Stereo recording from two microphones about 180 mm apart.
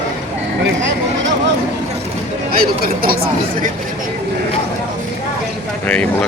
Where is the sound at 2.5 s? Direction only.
55° right (ahead or behind).